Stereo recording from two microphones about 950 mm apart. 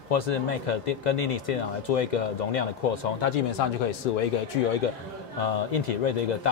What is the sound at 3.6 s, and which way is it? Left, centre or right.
Speech, left.